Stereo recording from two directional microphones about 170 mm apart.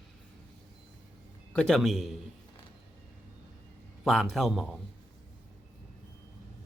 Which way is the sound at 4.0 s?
Centre (ahead or behind).